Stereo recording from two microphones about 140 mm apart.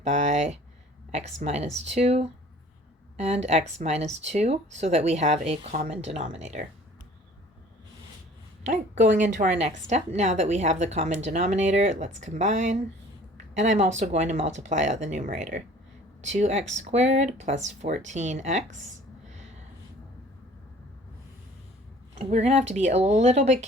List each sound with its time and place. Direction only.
0.0 s a woman's voice: 55° right (ahead or behind)
8.6 s a woman's voice: 60° right (ahead or behind)
22.1 s speech: 50° right (ahead or behind)